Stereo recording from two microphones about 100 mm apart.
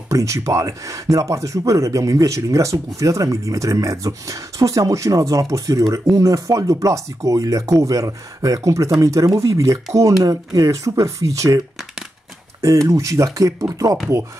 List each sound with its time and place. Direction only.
0.1 s speech: 35° right (ahead or behind)
12.6 s speech: 35° right (ahead or behind)